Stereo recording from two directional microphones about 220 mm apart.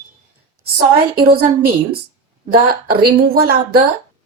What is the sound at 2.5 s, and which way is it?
A woman's voice, 45° right (ahead or behind).